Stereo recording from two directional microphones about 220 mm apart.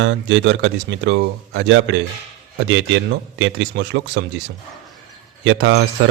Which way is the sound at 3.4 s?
55° right (ahead or behind).